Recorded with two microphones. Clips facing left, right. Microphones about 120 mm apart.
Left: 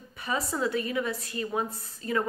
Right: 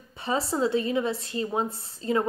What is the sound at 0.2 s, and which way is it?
A woman's voice, 30° right (ahead or behind).